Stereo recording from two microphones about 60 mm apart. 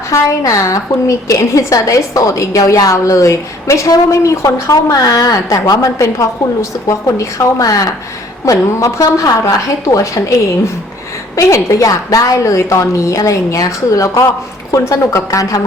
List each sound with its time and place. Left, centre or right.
0.1 s a woman's voice: left
8.4 s a woman's voice: left
11.3 s a woman's voice: left
14.7 s a woman's voice: left